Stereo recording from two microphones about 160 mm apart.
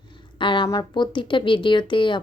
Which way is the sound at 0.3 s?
30° left (ahead or behind).